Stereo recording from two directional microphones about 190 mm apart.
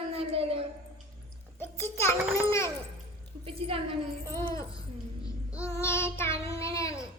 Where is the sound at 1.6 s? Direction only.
15° left (ahead or behind).